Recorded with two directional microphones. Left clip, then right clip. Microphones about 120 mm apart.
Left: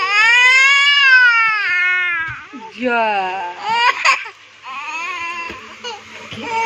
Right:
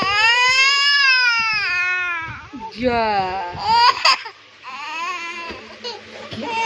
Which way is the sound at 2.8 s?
25° left (ahead or behind).